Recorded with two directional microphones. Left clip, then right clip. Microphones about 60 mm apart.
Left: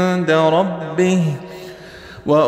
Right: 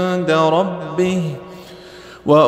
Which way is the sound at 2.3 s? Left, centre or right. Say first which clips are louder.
Right 3 dB; right.